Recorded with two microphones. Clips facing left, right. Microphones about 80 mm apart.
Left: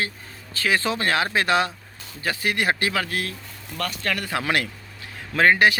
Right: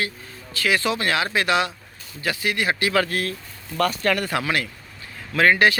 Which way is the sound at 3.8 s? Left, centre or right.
Centre.